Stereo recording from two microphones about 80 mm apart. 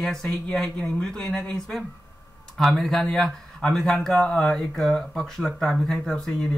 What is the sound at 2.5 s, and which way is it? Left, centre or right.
Speech, centre.